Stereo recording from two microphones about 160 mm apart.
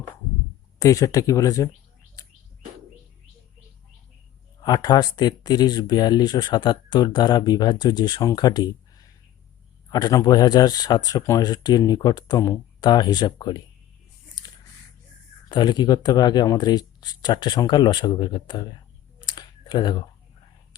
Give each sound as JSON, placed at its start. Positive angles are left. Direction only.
{"t": 0.8, "sound": "speech", "side_deg": 20}
{"t": 4.6, "sound": "speech", "side_deg": 25}
{"t": 15.4, "sound": "speech", "side_deg": 25}
{"t": 19.2, "sound": "a sound", "side_deg": 30}